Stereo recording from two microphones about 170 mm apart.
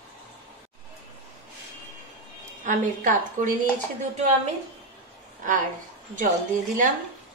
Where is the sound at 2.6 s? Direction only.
50° right (ahead or behind).